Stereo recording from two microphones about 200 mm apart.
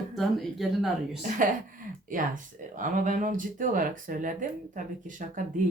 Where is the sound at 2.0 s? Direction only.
40° right (ahead or behind).